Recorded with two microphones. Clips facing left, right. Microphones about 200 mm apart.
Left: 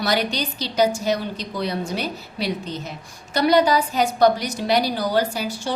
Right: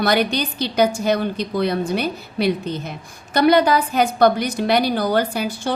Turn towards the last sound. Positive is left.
turn(degrees=-55)  # may be behind; listen again after turning